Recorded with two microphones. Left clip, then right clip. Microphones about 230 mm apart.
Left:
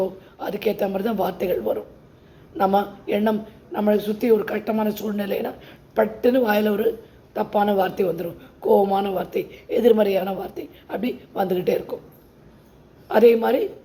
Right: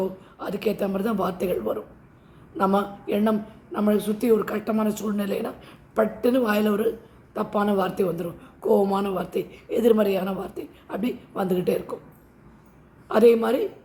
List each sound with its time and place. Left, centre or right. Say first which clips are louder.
0.3 s speech: left 3 dB; centre
13.1 s speech: left 2 dB; centre